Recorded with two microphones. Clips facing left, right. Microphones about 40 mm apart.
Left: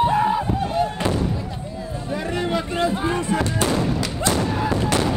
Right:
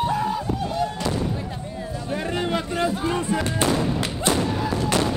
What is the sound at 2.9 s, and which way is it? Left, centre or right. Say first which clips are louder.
Music: left 2 dB; left.